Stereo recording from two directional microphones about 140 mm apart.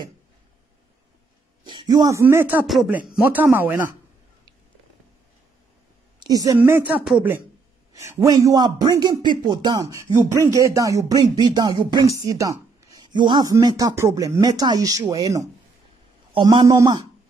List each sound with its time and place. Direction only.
1.6 s speech: 35° right (ahead or behind); by 2.6 s 15° right (ahead or behind)
2.6 s speech: centre (ahead or behind)
3.2 s a woman's voice: 10° right (ahead or behind)
6.1 s a woman's voice: 25° right (ahead or behind); by 7.4 s 10° right (ahead or behind)
7.9 s speech: 25° right (ahead or behind)
16.3 s a man's voice: 35° right (ahead or behind)